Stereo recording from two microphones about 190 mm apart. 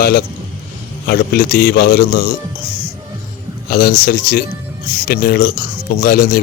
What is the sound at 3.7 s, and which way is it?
Speech, 50° left (ahead or behind).